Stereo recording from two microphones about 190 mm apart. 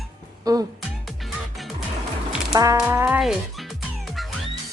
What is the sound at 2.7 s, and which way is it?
Speech, 10° right (ahead or behind).